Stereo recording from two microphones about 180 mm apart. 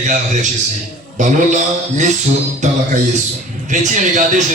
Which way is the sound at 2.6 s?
40° right (ahead or behind).